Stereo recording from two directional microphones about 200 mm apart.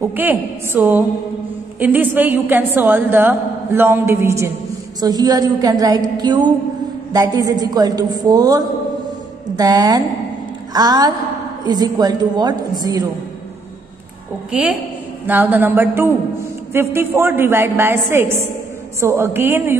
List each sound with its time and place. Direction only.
0.0 s a woman's voice: 10° right (ahead or behind)
14.5 s a woman's voice: 5° right (ahead or behind)